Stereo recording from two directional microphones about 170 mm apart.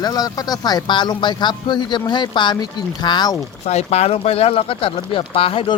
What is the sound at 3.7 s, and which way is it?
Speech, 40° left (ahead or behind).